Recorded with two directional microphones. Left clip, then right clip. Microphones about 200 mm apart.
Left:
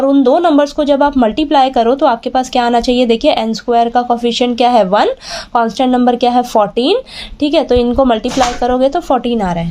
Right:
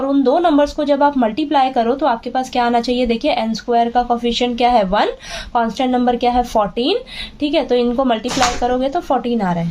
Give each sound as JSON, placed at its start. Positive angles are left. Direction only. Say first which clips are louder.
{"t": 0.0, "sound": "speech", "louder": "left 5 dB", "side_deg": 40}